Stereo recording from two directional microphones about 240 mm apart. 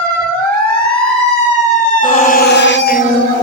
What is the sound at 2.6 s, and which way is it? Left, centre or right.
Speech, left.